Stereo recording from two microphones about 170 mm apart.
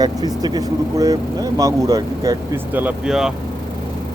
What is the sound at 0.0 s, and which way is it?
Speech, 20° right (ahead or behind).